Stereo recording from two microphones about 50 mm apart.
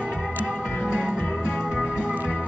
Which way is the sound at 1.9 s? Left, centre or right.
Right.